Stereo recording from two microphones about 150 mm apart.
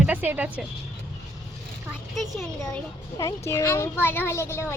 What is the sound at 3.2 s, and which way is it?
Speech, 20° left (ahead or behind).